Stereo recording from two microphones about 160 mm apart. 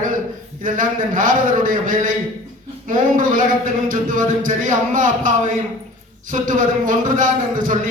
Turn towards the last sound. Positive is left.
turn(degrees=-55)  # may be behind; listen again after turning